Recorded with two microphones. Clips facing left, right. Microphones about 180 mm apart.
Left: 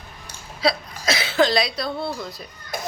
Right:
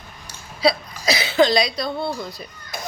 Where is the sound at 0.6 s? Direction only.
Centre (ahead or behind).